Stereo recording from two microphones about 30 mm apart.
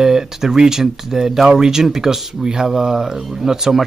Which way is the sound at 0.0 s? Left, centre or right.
Centre.